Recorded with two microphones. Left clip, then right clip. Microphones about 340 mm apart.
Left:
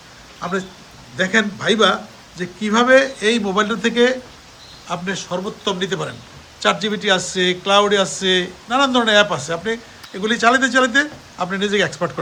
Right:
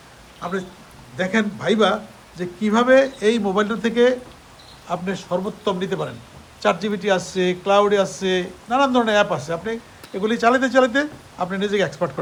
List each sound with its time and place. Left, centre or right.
0.4 s a man's voice: centre